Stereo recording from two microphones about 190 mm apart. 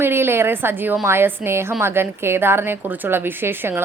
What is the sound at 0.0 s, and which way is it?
A woman's voice, 10° right (ahead or behind).